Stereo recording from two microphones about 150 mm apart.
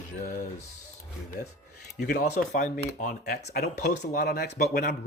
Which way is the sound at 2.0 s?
90° left.